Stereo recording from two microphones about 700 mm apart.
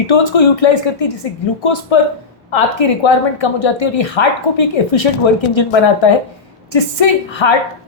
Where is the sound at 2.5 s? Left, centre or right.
Left.